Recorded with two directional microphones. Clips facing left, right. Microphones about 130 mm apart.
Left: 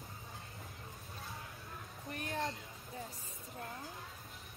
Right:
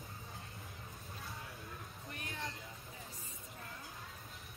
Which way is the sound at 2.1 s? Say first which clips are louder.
Left 7 dB; 40° left (ahead or behind).